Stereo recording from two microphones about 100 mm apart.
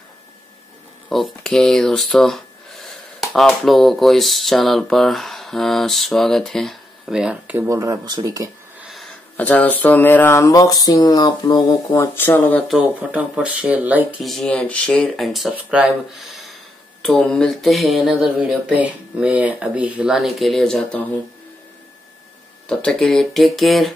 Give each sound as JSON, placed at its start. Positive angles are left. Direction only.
{"t": 1.0, "sound": "speech", "side_deg": 5}
{"t": 7.6, "sound": "speech", "side_deg": -30}
{"t": 9.4, "sound": "speech", "side_deg": 15}
{"t": 10.5, "sound": "speech", "side_deg": 40}
{"t": 12.0, "sound": "speech", "side_deg": 20}
{"t": 12.6, "sound": "speech", "side_deg": -5}
{"t": 14.2, "sound": "speech", "side_deg": 0}
{"t": 15.5, "sound": "speech", "side_deg": -10}
{"t": 22.7, "sound": "speech", "side_deg": 10}